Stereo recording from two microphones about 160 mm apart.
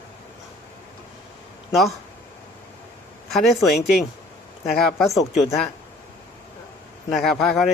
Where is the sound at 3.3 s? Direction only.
Centre (ahead or behind).